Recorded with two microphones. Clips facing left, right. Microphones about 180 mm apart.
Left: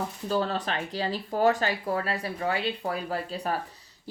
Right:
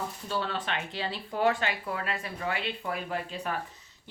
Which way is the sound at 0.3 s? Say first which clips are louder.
Left 5 dB; 40° left (ahead or behind).